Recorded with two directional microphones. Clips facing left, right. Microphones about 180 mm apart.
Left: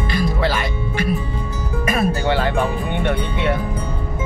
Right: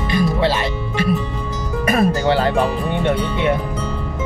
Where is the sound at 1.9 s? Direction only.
40° right (ahead or behind).